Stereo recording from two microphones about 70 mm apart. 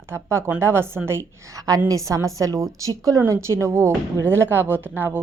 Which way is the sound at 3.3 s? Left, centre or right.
Right.